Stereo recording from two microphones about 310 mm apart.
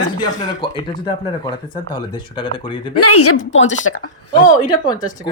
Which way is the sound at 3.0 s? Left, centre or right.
Left.